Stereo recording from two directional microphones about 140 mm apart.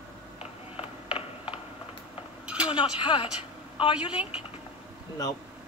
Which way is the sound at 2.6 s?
35° left (ahead or behind).